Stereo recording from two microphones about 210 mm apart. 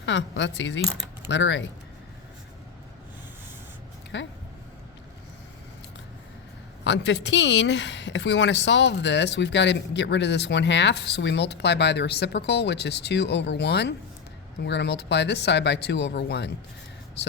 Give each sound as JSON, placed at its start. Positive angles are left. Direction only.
{"t": 0.0, "sound": "speech", "side_deg": 60}
{"t": 4.1, "sound": "speech", "side_deg": 60}
{"t": 6.8, "sound": "speech", "side_deg": 60}